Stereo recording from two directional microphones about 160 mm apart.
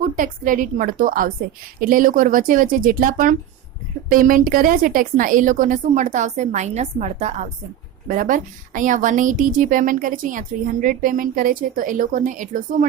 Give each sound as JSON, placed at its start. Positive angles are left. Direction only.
{"t": 0.0, "sound": "a woman's voice", "side_deg": -60}
{"t": 8.0, "sound": "a woman's voice", "side_deg": -55}